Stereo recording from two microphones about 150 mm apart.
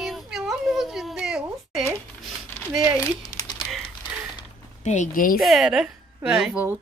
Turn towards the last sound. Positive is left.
turn(degrees=-10)  # may be behind; listen again after turning